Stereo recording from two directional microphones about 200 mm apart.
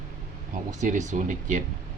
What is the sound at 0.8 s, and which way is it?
Speech, 40° right (ahead or behind).